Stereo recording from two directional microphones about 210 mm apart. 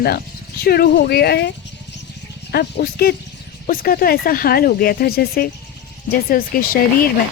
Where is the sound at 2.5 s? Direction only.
50° left (ahead or behind).